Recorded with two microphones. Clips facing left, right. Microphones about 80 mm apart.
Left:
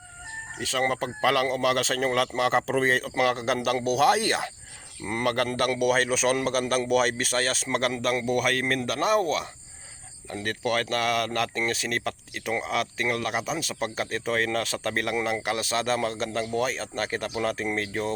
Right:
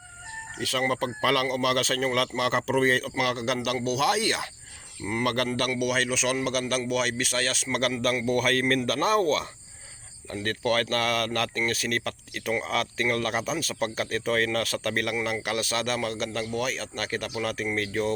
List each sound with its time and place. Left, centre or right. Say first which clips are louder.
0.6 s a man's voice: even; left